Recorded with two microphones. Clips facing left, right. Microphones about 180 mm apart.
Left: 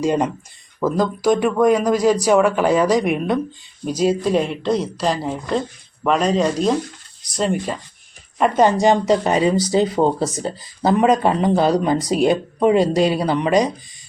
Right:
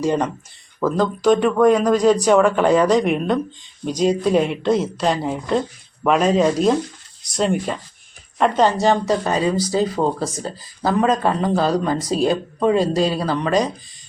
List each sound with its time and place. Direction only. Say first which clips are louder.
0.0 s speech: left 1 dB; 10° left (ahead or behind)
8.4 s speech: left 1 dB; 10° left (ahead or behind)